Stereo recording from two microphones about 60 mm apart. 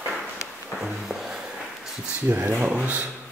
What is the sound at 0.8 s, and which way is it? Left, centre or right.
Music, centre.